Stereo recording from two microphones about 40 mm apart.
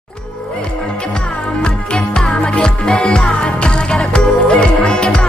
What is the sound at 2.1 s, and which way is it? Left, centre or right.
Music, left.